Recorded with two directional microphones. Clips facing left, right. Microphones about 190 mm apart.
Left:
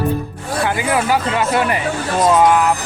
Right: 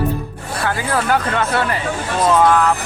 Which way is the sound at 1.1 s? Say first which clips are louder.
Left 1 dB; 10° left (ahead or behind).